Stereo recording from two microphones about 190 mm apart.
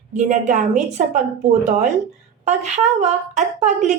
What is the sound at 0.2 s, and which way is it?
A woman's voice, 40° right (ahead or behind).